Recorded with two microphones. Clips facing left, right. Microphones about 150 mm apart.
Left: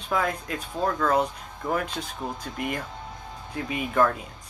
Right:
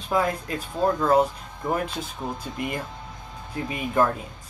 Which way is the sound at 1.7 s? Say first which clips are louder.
Right 1 dB; 5° right (ahead or behind).